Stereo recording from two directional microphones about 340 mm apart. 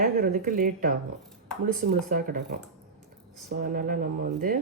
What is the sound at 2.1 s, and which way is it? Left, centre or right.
Speech, right.